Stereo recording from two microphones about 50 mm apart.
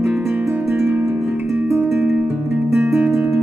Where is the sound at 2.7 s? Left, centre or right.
Right.